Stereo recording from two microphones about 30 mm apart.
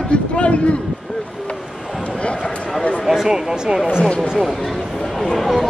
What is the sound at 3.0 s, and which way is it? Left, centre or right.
Speech, centre.